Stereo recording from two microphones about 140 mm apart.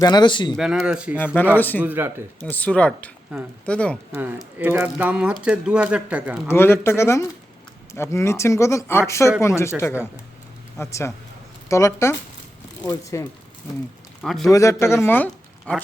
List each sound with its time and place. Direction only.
0.0 s speech: 30° left (ahead or behind)
0.5 s speech: centre (ahead or behind)
1.5 s speech: 15° left (ahead or behind)
1.8 s speech: 15° right (ahead or behind)
2.4 s speech: 10° left (ahead or behind)
3.3 s speech: 5° right (ahead or behind)
3.7 s speech: 10° left (ahead or behind)
4.1 s speech: 10° right (ahead or behind)
6.5 s speech: 15° left (ahead or behind)
10.8 s speech: 20° left (ahead or behind)
14.2 s a man's voice: centre (ahead or behind)
14.5 s speech: 20° left (ahead or behind)